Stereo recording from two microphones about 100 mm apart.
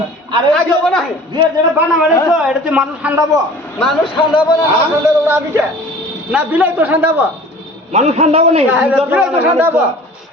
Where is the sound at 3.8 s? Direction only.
Centre (ahead or behind).